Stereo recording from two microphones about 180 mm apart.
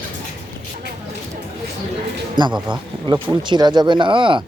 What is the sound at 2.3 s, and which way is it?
Speech, 25° right (ahead or behind).